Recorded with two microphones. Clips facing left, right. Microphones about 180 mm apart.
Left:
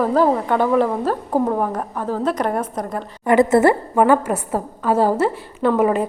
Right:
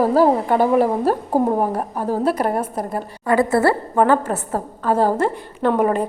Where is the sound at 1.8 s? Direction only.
15° right (ahead or behind).